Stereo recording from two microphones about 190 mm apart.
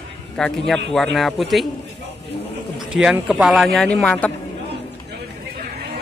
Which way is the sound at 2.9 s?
5° right (ahead or behind).